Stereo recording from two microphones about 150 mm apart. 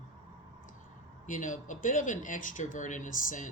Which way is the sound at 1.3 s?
60° left (ahead or behind).